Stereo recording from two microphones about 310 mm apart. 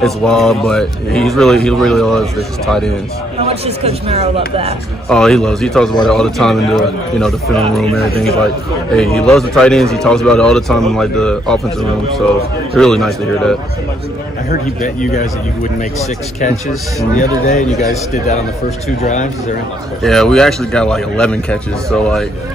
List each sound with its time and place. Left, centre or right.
0.0 s speech: centre
3.4 s speech: centre
5.1 s speech: centre
12.7 s speech: centre
14.5 s a man's voice: left
17.2 s a man's voice: left
20.0 s speech: centre